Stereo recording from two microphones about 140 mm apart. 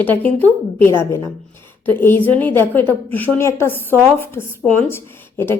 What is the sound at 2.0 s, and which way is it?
A woman's voice, 15° left (ahead or behind).